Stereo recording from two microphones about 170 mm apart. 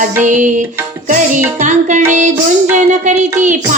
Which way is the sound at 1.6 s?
45° right (ahead or behind).